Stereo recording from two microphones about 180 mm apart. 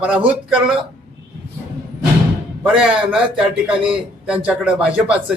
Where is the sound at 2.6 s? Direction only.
5° right (ahead or behind).